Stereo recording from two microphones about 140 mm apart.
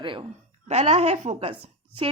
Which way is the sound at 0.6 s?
50° right (ahead or behind).